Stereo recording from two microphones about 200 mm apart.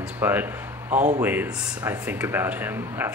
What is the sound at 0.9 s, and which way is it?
Speech, 35° right (ahead or behind).